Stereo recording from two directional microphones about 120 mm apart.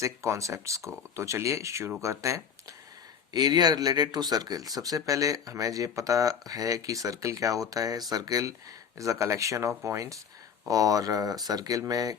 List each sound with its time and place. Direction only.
0.0 s speech: 25° right (ahead or behind)